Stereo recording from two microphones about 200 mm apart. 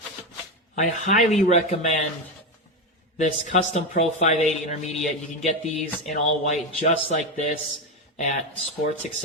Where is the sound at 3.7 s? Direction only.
35° left (ahead or behind).